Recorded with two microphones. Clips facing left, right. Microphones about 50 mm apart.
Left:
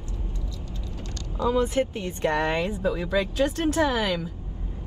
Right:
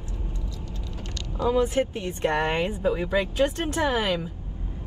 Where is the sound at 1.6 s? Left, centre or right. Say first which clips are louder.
Right 1 dB; right.